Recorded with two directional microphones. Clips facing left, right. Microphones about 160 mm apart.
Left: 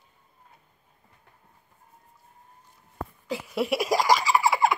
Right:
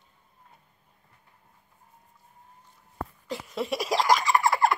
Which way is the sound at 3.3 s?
5° left (ahead or behind).